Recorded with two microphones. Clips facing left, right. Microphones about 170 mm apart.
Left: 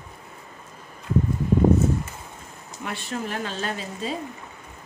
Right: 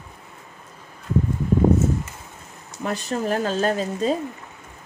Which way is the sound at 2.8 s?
40° right (ahead or behind).